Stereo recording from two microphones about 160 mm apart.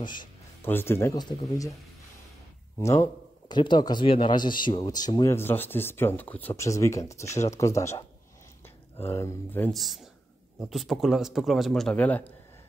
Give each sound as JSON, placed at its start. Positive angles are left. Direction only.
{"t": 0.0, "sound": "a man's voice", "side_deg": 30}
{"t": 0.7, "sound": "a man's voice", "side_deg": 15}
{"t": 2.8, "sound": "a man's voice", "side_deg": 20}
{"t": 9.7, "sound": "a man's voice", "side_deg": 0}